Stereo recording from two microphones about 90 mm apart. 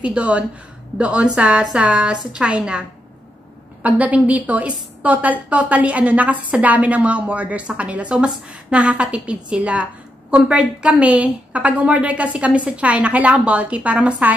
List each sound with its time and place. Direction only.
0.0 s a woman's voice: 15° right (ahead or behind)
3.8 s a woman's voice: 15° right (ahead or behind)